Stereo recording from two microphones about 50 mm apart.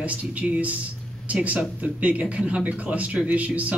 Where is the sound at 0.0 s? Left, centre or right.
Right.